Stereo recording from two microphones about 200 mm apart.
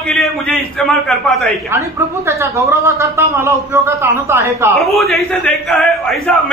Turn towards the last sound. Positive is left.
turn(degrees=5)  # may be behind; listen again after turning